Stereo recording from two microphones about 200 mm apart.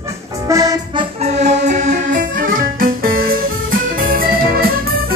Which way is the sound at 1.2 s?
35° right (ahead or behind).